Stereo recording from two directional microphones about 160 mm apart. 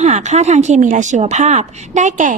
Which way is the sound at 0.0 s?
45° right (ahead or behind).